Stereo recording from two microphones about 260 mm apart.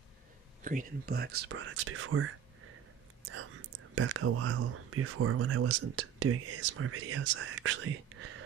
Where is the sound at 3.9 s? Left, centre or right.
Right.